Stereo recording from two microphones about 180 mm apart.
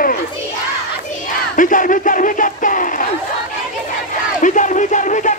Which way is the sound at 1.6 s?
45° left (ahead or behind).